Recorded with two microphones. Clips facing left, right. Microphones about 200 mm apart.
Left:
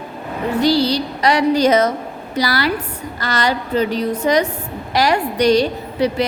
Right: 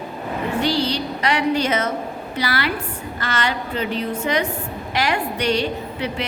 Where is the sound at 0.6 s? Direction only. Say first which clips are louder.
Left 7 dB; 35° left (ahead or behind).